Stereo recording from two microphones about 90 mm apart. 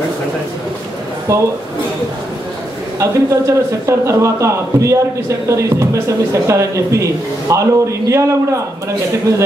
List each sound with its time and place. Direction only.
1.3 s speech: 35° right (ahead or behind)
3.0 s speech: 35° right (ahead or behind)